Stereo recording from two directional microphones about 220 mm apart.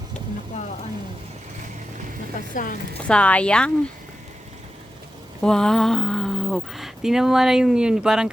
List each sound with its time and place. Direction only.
2.5 s speech: 35° left (ahead or behind)
3.0 s speech: 5° left (ahead or behind)
5.4 s speech: 5° left (ahead or behind)